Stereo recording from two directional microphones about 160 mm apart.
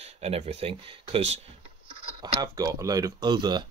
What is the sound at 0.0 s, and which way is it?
Speech, 40° right (ahead or behind).